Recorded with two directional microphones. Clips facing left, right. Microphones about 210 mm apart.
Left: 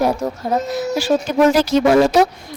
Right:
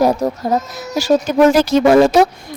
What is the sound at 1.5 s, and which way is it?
Speech, 55° right (ahead or behind).